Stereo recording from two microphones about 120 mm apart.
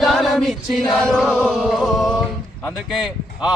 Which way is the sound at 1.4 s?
10° right (ahead or behind).